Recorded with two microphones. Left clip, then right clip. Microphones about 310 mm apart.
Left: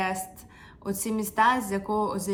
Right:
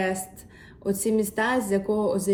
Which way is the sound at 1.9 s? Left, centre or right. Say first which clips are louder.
Right 2 dB; left.